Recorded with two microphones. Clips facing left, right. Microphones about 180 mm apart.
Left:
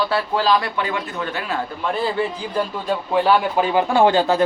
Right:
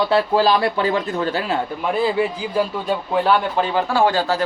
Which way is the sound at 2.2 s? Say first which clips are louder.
Right 2 dB; 5° right (ahead or behind).